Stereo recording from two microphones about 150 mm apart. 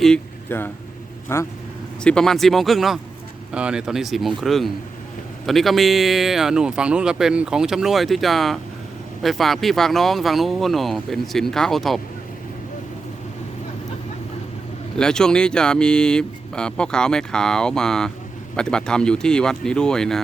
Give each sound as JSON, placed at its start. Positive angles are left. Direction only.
{"t": 0.5, "sound": "speech", "side_deg": 15}
{"t": 2.0, "sound": "speech", "side_deg": 5}
{"t": 14.9, "sound": "speech", "side_deg": 5}